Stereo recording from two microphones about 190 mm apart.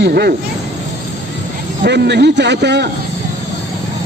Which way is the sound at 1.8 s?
65° right (ahead or behind).